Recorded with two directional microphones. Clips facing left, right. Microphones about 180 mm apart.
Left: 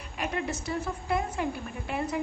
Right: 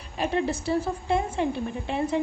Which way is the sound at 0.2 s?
30° right (ahead or behind).